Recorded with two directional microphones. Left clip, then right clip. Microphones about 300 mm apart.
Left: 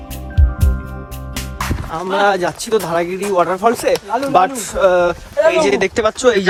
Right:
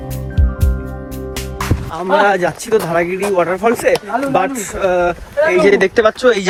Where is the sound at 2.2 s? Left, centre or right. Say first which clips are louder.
Right 1 dB; centre.